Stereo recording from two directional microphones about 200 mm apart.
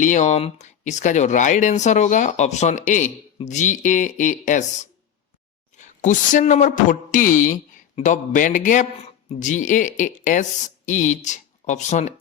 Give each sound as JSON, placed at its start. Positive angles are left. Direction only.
{"t": 0.0, "sound": "speech", "side_deg": 35}
{"t": 5.7, "sound": "speech", "side_deg": 40}